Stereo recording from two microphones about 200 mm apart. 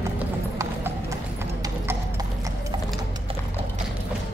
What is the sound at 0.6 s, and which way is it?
Clip-clop, 15° right (ahead or behind).